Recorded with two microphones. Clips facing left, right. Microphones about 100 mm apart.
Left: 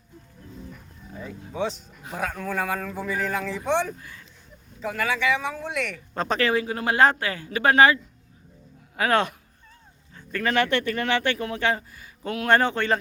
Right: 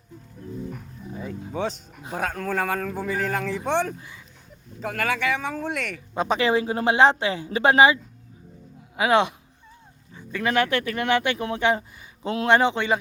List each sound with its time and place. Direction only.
2.1 s speech: 50° right (ahead or behind)
6.1 s speech: 15° right (ahead or behind)
6.5 s speech: 25° right (ahead or behind)
9.0 s speech: 15° right (ahead or behind)